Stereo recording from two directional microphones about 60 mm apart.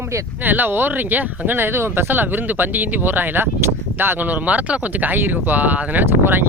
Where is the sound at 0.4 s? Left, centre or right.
Right.